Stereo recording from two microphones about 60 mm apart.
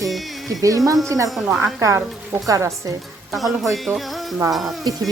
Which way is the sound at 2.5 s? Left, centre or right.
Right.